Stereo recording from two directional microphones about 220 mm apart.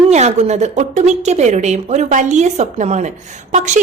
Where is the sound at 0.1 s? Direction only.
30° right (ahead or behind).